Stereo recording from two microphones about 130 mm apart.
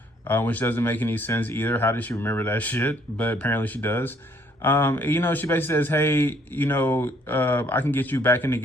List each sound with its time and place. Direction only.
0.3 s a man's voice: 15° left (ahead or behind)